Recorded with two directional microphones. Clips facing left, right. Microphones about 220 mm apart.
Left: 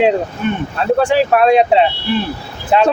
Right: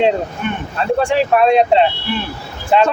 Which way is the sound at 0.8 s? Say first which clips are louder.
Left 2 dB; centre (ahead or behind).